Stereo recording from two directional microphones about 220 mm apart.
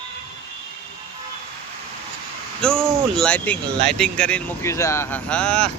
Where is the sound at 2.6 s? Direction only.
5° left (ahead or behind).